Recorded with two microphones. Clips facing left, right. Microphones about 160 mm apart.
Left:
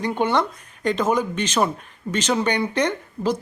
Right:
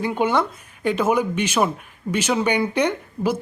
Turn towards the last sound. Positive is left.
turn(degrees=-10)  # may be behind; listen again after turning